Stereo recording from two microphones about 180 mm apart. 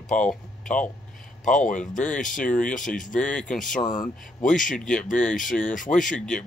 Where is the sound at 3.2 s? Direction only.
5° left (ahead or behind).